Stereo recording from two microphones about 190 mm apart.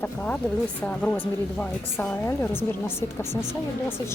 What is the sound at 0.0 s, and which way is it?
Speech, 5° left (ahead or behind).